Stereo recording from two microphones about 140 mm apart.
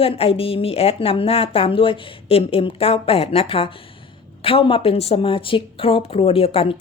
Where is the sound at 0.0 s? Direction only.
40° left (ahead or behind).